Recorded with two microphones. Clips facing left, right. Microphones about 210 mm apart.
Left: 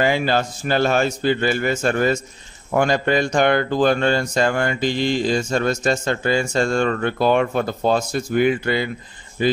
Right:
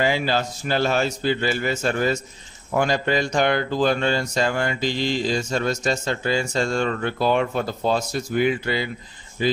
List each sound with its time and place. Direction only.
0.0 s speech: 55° left (ahead or behind)